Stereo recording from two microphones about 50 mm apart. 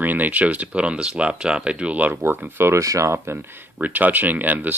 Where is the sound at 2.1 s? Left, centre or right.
Right.